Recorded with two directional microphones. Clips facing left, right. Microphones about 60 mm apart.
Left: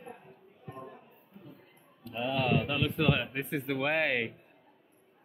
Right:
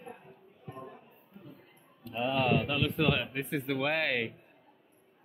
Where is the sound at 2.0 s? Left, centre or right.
Centre.